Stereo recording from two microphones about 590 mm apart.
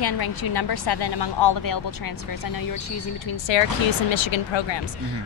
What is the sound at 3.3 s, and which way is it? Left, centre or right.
A woman's voice, left.